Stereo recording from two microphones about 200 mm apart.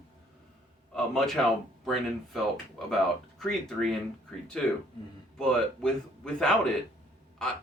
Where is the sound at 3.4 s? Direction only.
Centre (ahead or behind).